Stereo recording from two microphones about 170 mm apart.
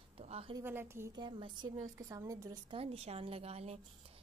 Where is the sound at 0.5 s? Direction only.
15° right (ahead or behind).